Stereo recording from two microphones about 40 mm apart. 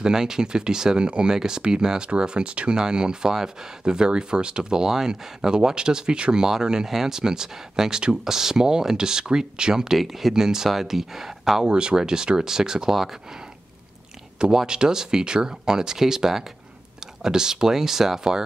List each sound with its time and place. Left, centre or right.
0.0 s speech: centre
9.9 s speech: centre
11.6 s speech: right
14.7 s speech: centre